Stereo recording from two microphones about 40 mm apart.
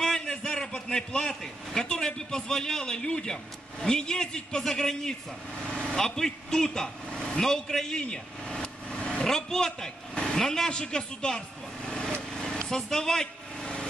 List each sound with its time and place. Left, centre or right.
0.0 s a sound: centre
0.5 s a man's voice: left
5.7 s a man's voice: left
8.0 s vehicle: centre
9.2 s a man's voice: centre
10.7 s vehicle: centre
12.5 s speech: centre